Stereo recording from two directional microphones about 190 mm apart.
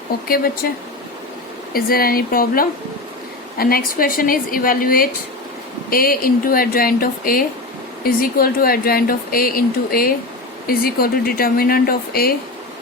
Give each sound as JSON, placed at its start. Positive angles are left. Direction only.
{"t": 0.3, "sound": "speech", "side_deg": 50}
{"t": 1.7, "sound": "speech", "side_deg": 50}